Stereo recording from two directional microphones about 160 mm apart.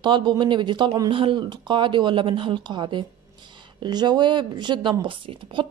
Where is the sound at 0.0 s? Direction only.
30° right (ahead or behind).